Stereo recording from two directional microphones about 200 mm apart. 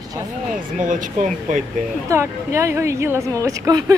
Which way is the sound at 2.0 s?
15° right (ahead or behind).